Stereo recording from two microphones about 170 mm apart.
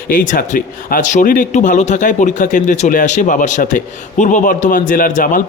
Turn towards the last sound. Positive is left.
turn(degrees=50)  # may be behind; listen again after turning